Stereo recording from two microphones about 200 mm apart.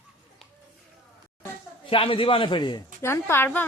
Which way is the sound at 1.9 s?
25° left (ahead or behind).